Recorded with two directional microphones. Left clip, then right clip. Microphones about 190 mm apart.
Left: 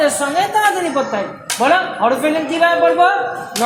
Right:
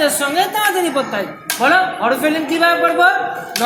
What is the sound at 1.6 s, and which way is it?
Speech, 25° left (ahead or behind).